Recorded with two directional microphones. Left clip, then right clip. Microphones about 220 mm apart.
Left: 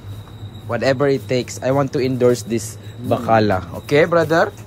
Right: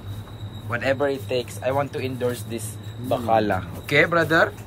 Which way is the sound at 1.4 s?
40° left (ahead or behind).